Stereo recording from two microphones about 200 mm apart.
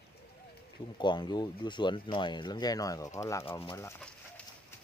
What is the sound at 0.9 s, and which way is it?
Speech, 20° left (ahead or behind).